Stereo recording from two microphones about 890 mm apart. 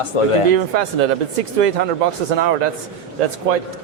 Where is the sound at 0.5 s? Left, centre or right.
Right.